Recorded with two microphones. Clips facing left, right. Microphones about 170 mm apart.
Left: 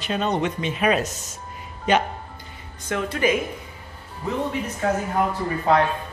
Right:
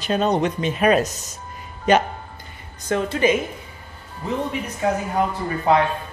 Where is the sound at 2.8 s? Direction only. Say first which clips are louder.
Right 3 dB; 30° right (ahead or behind).